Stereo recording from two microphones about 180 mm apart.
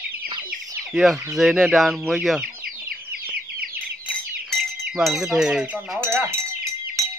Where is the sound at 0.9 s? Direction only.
Centre (ahead or behind).